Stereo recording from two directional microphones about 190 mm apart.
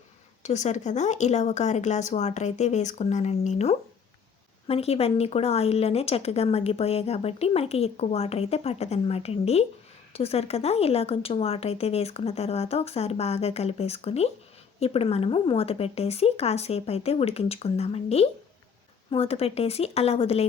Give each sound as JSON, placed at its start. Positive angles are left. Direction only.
{"t": 0.4, "sound": "speech", "side_deg": 40}